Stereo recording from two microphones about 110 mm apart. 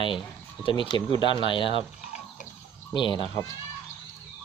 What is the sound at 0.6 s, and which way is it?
Speech, 50° left (ahead or behind).